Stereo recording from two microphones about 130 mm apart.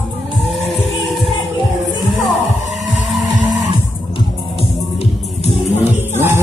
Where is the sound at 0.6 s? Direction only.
Centre (ahead or behind).